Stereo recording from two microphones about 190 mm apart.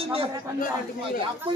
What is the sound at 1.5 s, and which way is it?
Speech, 25° right (ahead or behind).